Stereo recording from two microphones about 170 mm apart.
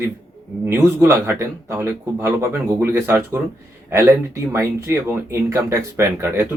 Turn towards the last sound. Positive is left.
turn(degrees=-15)  # may be behind; listen again after turning